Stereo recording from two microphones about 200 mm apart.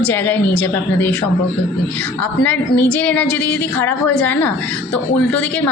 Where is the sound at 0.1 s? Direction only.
10° left (ahead or behind).